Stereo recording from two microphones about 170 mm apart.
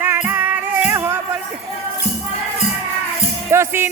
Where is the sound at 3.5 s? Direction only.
15° right (ahead or behind).